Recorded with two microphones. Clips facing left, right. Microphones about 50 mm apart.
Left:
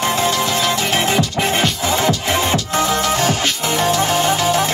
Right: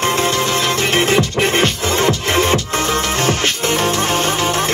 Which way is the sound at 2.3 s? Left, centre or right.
Right.